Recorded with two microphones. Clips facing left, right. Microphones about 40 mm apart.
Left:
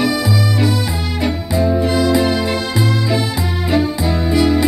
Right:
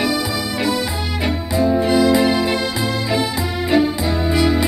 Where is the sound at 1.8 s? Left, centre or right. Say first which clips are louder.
Right 2 dB; centre.